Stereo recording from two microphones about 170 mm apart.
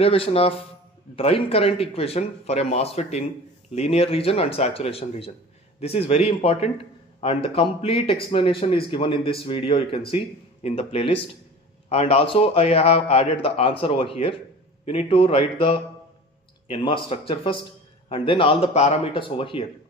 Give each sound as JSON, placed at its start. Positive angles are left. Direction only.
{"t": 0.0, "sound": "a man's voice", "side_deg": 35}